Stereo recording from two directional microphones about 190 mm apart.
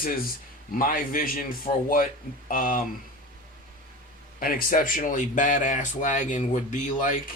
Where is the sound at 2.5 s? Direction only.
45° left (ahead or behind).